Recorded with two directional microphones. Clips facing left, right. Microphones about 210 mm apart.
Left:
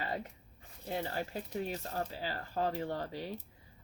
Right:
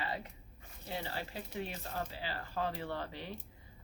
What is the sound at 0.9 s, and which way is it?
Speech, 45° left (ahead or behind).